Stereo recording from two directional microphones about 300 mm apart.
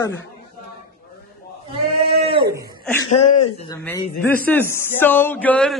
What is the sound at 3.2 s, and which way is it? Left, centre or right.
Speech, left.